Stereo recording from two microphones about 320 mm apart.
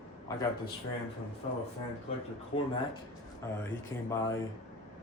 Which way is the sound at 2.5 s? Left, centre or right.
Left.